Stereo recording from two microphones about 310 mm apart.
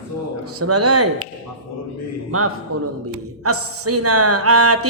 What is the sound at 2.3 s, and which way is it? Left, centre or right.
A woman's voice, right.